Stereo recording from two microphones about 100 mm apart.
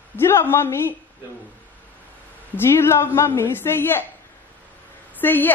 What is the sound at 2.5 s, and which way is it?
A woman's voice, 25° left (ahead or behind).